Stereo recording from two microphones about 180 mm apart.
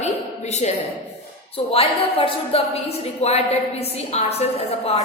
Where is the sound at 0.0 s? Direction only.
40° left (ahead or behind).